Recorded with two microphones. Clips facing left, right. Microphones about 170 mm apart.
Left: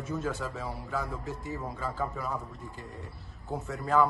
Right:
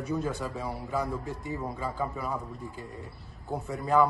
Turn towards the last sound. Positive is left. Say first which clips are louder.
# right 2 dB
turn(degrees=0)  # may be behind; listen again after turning